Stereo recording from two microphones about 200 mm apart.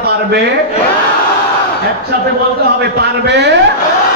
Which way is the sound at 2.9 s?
60° right (ahead or behind).